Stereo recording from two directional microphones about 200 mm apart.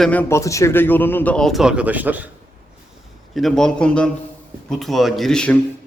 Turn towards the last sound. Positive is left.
turn(degrees=5)  # may be behind; listen again after turning